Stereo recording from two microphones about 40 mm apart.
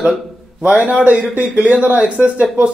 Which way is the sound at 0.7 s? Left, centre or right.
Right.